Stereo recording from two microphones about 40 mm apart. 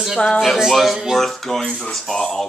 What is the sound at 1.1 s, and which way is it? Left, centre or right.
Speech, centre.